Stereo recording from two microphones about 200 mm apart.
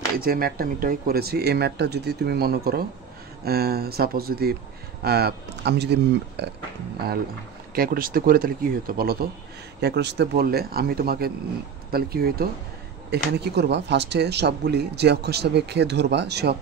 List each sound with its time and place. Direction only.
0.2 s speech: 50° right (ahead or behind)
7.7 s speech: 50° right (ahead or behind)